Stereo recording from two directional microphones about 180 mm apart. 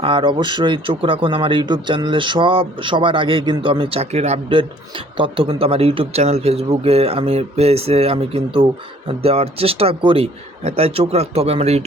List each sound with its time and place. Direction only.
0.0 s a man's voice: 30° right (ahead or behind)